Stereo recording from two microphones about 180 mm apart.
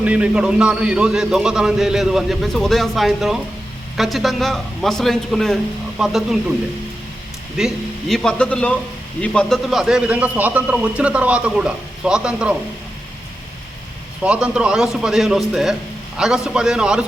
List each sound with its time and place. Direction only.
0.0 s a man's voice: 5° right (ahead or behind)
7.5 s a man's voice: centre (ahead or behind)
14.3 s a man's voice: 5° right (ahead or behind)